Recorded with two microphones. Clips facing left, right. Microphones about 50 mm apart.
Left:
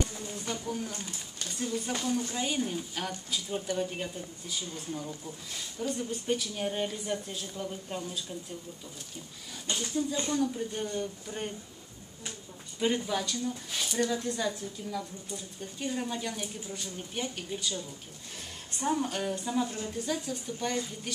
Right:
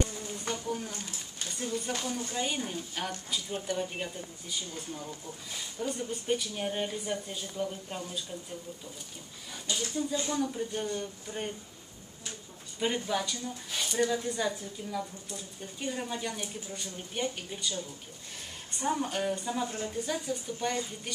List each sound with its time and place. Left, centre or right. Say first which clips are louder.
0.7 s a sound: even; centre
1.5 s speech: left 1 dB; centre
9.7 s speech: even; left
10.3 s speech: left 1 dB; centre
12.7 s speech: left 1 dB; centre